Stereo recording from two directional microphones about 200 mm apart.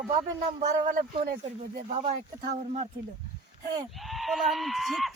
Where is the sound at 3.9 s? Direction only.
Centre (ahead or behind).